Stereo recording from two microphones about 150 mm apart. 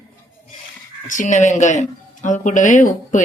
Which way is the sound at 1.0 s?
60° left (ahead or behind).